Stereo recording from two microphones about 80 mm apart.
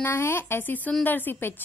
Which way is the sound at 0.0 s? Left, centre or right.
Left.